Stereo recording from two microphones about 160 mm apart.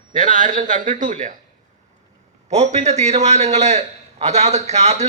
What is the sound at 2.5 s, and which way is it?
A man's voice, 45° right (ahead or behind).